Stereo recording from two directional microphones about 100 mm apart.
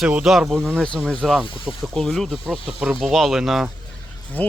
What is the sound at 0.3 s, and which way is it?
Speech, centre (ahead or behind).